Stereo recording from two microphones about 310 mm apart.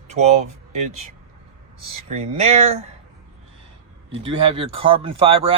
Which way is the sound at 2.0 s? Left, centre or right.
Right.